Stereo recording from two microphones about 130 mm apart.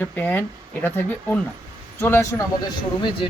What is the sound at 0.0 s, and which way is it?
Speech, 15° left (ahead or behind).